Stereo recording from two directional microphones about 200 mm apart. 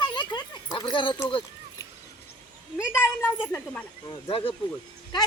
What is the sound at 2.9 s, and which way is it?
Speech, 10° left (ahead or behind).